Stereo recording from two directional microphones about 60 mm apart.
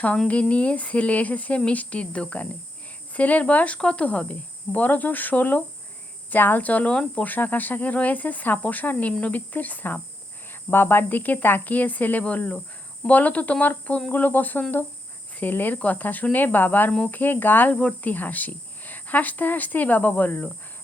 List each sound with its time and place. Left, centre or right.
0.3 s speech: left